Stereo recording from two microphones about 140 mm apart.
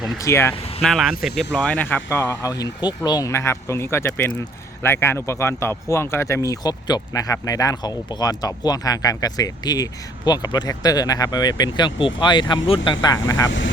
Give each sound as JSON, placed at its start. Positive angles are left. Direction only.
{"t": 0.2, "sound": "speech", "side_deg": 20}
{"t": 0.5, "sound": "vehicle", "side_deg": 45}
{"t": 0.8, "sound": "speech", "side_deg": 0}